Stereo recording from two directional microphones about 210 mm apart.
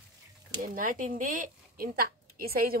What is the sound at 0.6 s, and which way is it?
A woman's voice, 40° right (ahead or behind).